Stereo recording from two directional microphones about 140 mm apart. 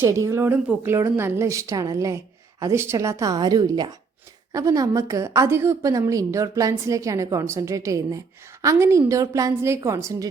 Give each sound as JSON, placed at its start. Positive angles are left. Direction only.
{"t": 0.0, "sound": "a woman's voice", "side_deg": -20}